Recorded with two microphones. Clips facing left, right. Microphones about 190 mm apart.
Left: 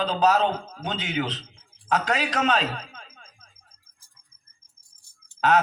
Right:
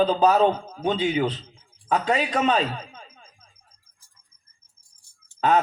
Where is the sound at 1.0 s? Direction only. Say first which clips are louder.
Right 6 dB; 85° left.